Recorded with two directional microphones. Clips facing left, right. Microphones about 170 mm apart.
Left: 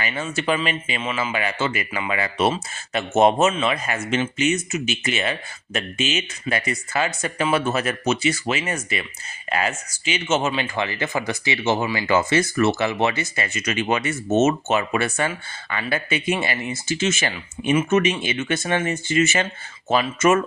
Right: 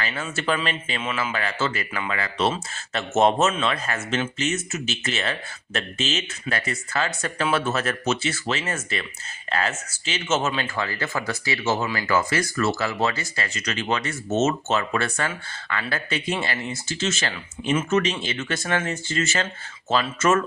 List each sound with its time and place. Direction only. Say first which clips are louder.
0.0 s a man's voice: left 3 dB; 15° left (ahead or behind)
6.5 s a man's voice: left 3 dB; 15° left (ahead or behind)
8.0 s speech: left 5 dB; centre (ahead or behind)
8.3 s a man's voice: left 3 dB; 15° left (ahead or behind)